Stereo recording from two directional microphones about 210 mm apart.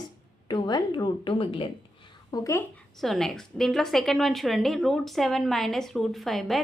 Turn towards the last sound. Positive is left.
turn(degrees=0)  # may be behind; listen again after turning